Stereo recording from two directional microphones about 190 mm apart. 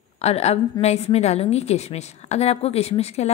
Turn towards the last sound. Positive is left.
turn(degrees=35)  # may be behind; listen again after turning